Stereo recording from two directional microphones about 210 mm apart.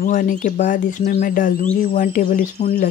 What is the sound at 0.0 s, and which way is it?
Speech, 40° left (ahead or behind).